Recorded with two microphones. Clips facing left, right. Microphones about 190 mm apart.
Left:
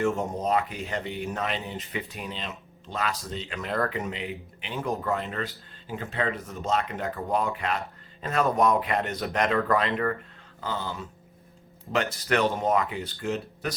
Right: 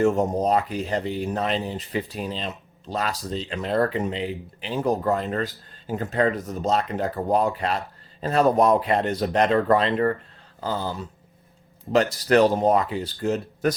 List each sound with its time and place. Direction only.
0.0 s speech: 35° right (ahead or behind)